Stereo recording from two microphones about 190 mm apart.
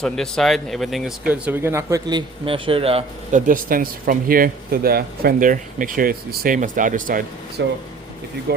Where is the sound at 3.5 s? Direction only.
50° right (ahead or behind).